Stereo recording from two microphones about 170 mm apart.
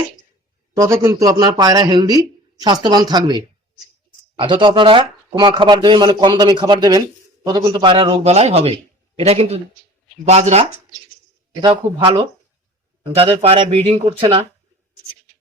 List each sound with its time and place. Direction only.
0.8 s speech: 15° right (ahead or behind); by 14.4 s 30° right (ahead or behind)